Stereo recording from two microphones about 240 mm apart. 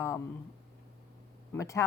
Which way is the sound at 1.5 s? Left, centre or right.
Centre.